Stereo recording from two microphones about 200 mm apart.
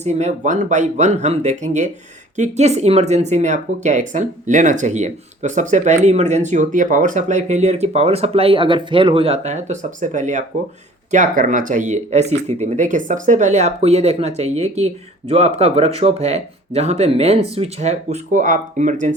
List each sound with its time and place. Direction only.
0.0 s speech: 35° right (ahead or behind)